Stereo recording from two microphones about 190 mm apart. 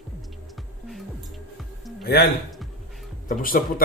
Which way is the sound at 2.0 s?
55° left (ahead or behind).